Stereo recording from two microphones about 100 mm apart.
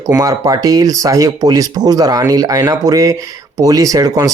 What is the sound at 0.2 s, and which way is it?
Speech, 35° right (ahead or behind).